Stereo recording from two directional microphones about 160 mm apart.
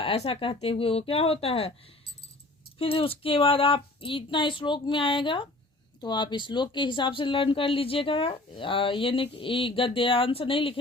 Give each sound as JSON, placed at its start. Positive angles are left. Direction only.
{"t": 0.0, "sound": "speech", "side_deg": 40}